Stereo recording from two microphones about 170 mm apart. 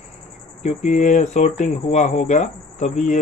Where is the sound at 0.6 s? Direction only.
45° left (ahead or behind).